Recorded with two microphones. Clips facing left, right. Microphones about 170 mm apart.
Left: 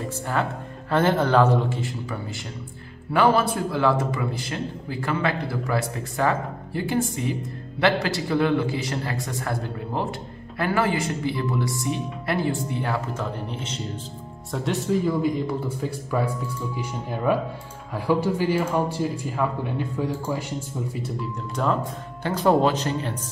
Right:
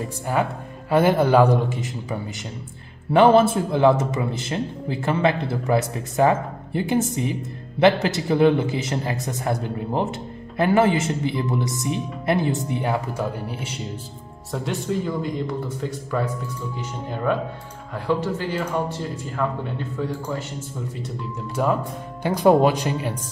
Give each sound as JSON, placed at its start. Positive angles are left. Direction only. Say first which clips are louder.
{"t": 0.3, "sound": "a man's voice", "louder": "right 4 dB", "side_deg": -10}
{"t": 21.6, "sound": "speech", "louder": "right 2 dB", "side_deg": -10}